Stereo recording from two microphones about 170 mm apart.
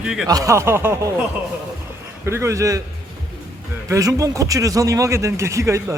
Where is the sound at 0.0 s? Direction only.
5° right (ahead or behind).